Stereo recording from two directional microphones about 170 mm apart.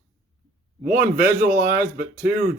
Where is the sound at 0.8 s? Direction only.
55° right (ahead or behind).